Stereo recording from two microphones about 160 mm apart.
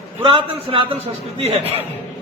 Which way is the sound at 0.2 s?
35° right (ahead or behind).